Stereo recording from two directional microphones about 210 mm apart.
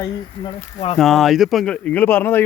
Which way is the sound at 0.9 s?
Centre (ahead or behind).